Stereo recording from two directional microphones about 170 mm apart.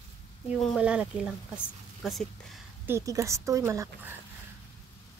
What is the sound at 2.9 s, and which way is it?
Speech, 15° right (ahead or behind).